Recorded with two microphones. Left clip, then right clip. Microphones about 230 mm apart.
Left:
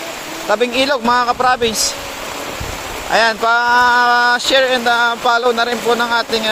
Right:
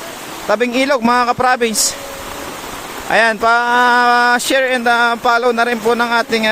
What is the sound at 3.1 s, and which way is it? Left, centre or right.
Speech, right.